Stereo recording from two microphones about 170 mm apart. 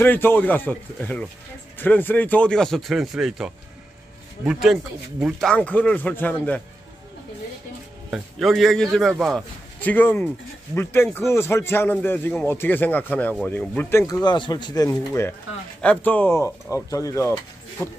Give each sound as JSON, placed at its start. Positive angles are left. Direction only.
{"t": 0.0, "sound": "a man's voice", "side_deg": 10}
{"t": 8.1, "sound": "a man's voice", "side_deg": 0}